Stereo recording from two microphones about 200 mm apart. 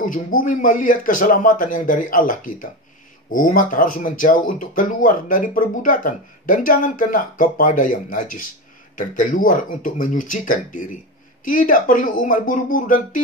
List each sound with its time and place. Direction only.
0.0 s speech: 40° left (ahead or behind)